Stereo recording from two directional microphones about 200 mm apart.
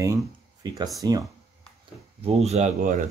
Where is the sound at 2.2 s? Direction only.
30° right (ahead or behind).